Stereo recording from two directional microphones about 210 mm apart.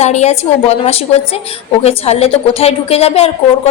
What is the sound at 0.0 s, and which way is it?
A woman's voice, 30° left (ahead or behind).